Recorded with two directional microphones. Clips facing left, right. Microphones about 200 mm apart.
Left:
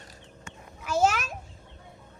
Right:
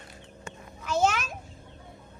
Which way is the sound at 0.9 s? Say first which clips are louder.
Left 1 dB; 5° left (ahead or behind).